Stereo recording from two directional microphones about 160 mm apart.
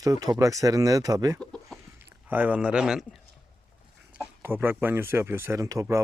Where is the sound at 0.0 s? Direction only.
20° right (ahead or behind).